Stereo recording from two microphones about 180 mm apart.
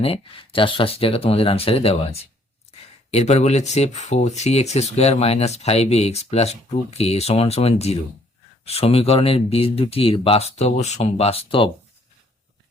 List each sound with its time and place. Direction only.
0.0 s speech: 30° left (ahead or behind)
3.1 s speech: 35° left (ahead or behind)